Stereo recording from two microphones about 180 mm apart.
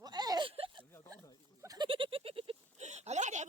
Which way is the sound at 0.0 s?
20° right (ahead or behind).